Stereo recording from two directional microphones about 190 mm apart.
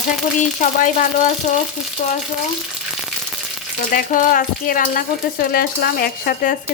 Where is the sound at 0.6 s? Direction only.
40° left (ahead or behind).